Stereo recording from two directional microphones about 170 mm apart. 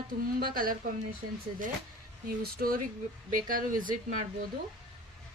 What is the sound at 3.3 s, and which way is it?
Speech, 55° right (ahead or behind).